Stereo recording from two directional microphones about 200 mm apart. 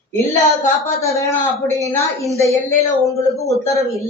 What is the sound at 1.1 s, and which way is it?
A man's voice, 15° left (ahead or behind).